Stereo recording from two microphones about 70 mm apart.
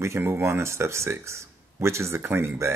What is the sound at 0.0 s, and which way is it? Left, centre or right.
Speech, right.